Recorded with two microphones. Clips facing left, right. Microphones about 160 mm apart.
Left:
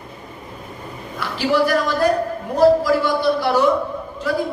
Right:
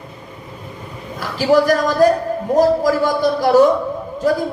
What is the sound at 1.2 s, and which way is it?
Speech, 40° right (ahead or behind).